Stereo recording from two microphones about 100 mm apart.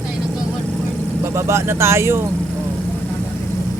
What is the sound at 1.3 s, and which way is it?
Speech, 25° right (ahead or behind).